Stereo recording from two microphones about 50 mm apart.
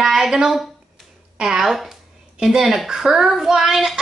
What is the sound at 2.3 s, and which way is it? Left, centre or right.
A woman's voice, centre.